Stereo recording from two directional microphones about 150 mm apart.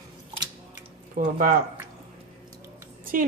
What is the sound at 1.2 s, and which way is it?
Speech, 75° right (ahead or behind).